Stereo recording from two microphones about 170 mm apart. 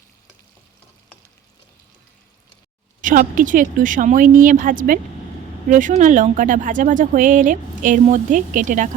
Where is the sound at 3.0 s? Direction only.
50° right (ahead or behind).